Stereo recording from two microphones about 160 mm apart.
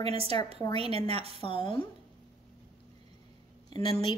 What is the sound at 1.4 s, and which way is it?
Speech, 35° left (ahead or behind).